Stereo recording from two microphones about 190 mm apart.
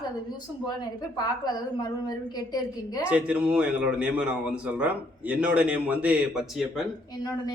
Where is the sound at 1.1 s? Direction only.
20° left (ahead or behind).